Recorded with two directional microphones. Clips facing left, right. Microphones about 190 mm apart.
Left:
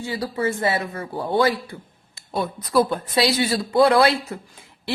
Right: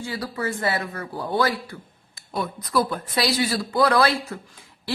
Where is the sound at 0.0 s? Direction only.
25° left (ahead or behind).